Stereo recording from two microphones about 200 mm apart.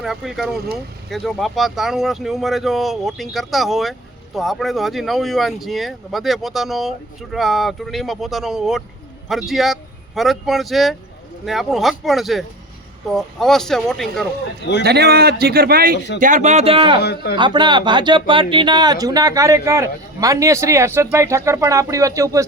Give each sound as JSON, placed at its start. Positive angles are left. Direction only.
{"t": 0.0, "sound": "speech", "side_deg": 0}
{"t": 14.8, "sound": "a man's voice", "side_deg": -55}
{"t": 16.0, "sound": "a man's voice", "side_deg": 60}
{"t": 16.2, "sound": "a man's voice", "side_deg": -35}
{"t": 17.0, "sound": "a man's voice", "side_deg": 55}
{"t": 17.3, "sound": "speech", "side_deg": -20}